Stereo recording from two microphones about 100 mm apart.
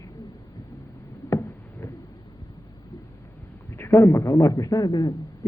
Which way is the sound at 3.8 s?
25° left (ahead or behind).